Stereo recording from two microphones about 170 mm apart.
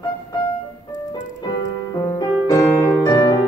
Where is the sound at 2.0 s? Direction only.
15° left (ahead or behind).